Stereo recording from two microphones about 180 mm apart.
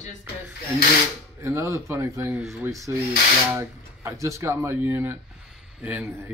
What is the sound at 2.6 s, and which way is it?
Speech, 15° right (ahead or behind).